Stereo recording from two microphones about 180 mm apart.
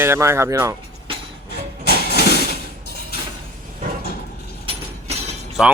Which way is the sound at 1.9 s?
60° left (ahead or behind).